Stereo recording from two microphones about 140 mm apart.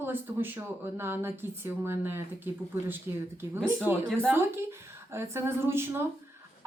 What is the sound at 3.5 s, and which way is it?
Speech, 5° left (ahead or behind).